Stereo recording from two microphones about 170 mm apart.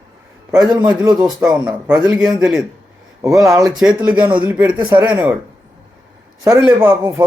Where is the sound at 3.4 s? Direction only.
20° right (ahead or behind).